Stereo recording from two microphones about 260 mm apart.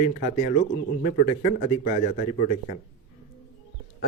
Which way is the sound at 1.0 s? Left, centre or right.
Left.